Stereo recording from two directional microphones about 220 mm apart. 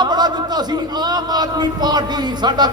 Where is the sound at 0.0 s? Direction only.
20° right (ahead or behind).